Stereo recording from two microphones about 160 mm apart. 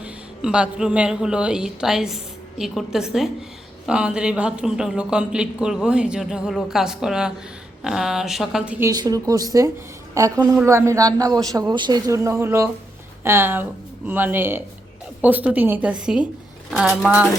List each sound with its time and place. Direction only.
0.0 s speech: 5° right (ahead or behind)
8.9 s a woman's voice: 25° right (ahead or behind); by 17.2 s 5° right (ahead or behind)